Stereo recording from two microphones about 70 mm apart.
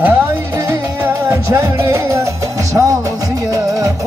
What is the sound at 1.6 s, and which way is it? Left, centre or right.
Music, right.